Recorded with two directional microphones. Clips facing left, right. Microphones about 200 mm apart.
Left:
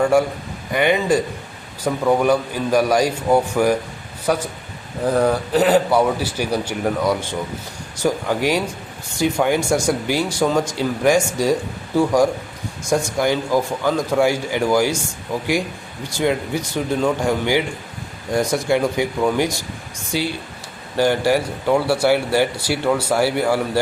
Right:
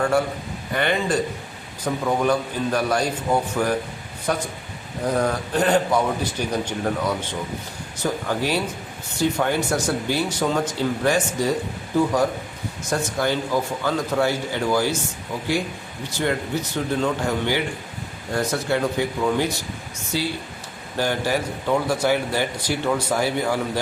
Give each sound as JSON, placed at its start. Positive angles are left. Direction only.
{"t": 0.0, "sound": "a man's voice", "side_deg": 10}
{"t": 16.0, "sound": "speech", "side_deg": 10}